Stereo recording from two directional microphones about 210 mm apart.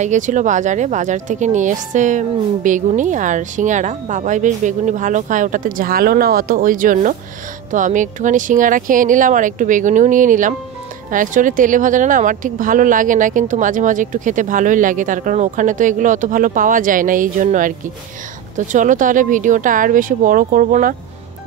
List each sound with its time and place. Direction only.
0.0 s speech: 35° right (ahead or behind)